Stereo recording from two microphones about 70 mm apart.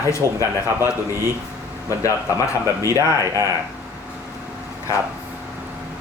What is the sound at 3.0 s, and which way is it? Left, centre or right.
Speech, right.